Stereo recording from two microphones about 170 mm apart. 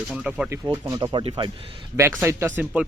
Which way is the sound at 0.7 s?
25° right (ahead or behind).